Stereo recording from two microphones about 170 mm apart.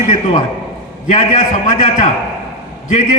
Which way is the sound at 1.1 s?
45° left (ahead or behind).